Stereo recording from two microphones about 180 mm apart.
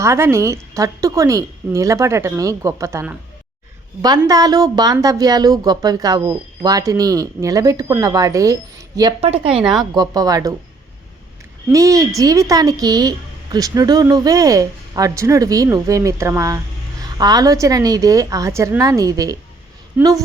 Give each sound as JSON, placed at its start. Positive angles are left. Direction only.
{"t": 0.0, "sound": "a woman's voice", "side_deg": -15}
{"t": 9.2, "sound": "a woman's voice", "side_deg": -35}
{"t": 11.7, "sound": "a woman's voice", "side_deg": -20}